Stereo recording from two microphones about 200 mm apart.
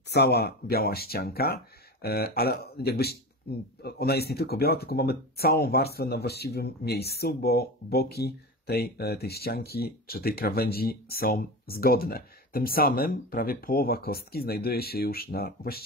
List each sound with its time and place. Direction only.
0.1 s speech: 55° left (ahead or behind)